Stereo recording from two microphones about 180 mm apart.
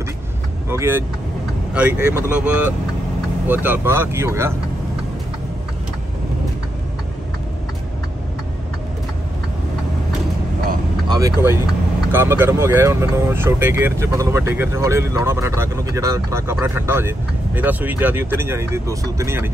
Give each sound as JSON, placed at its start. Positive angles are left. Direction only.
{"t": 0.7, "sound": "speech", "side_deg": -15}
{"t": 3.4, "sound": "speech", "side_deg": -10}
{"t": 11.1, "sound": "speech", "side_deg": -20}